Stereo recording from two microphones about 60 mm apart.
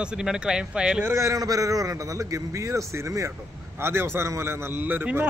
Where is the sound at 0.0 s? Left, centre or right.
Centre.